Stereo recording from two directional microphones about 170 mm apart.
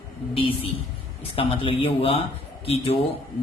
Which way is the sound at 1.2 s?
30° left (ahead or behind).